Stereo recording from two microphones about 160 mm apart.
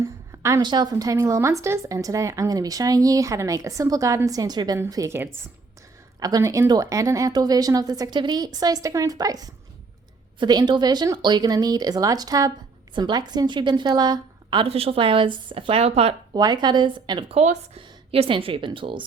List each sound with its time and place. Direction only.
0.3 s speech: 20° right (ahead or behind); by 16.4 s 40° right (ahead or behind)
16.4 s a woman's voice: 25° right (ahead or behind)